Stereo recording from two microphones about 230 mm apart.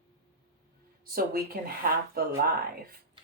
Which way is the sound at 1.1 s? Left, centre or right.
Right.